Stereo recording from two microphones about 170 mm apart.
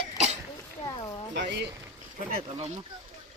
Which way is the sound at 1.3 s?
90° right.